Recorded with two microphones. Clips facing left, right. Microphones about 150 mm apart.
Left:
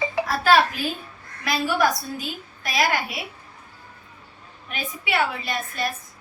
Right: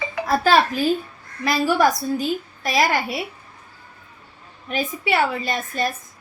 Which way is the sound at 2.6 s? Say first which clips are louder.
Right 3 dB; 45° right (ahead or behind).